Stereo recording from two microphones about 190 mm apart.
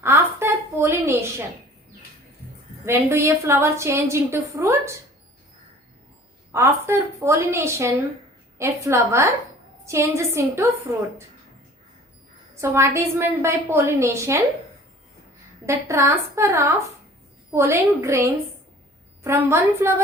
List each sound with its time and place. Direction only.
0.0 s a sound: 15° right (ahead or behind)
2.8 s a woman's voice: 15° right (ahead or behind)
6.5 s a woman's voice: 15° right (ahead or behind)
12.5 s a woman's voice: 15° right (ahead or behind)
15.6 s a woman's voice: 15° right (ahead or behind)